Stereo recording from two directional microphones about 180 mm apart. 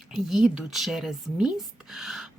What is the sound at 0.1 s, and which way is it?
Speech, centre (ahead or behind).